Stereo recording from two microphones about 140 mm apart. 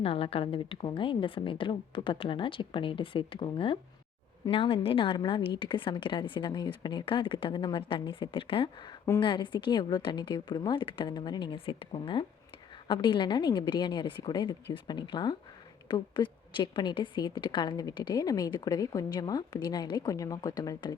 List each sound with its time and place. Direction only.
0.0 s a woman's voice: 40° left (ahead or behind)